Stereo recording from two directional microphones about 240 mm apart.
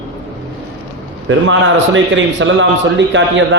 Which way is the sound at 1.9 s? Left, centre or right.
Right.